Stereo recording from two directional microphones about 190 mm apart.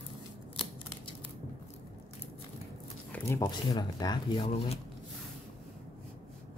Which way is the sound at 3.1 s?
15° left (ahead or behind).